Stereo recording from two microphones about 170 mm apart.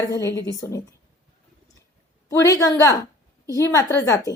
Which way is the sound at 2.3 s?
15° left (ahead or behind).